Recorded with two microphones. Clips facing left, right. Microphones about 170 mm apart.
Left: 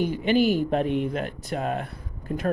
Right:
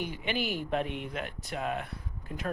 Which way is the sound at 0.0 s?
40° left (ahead or behind).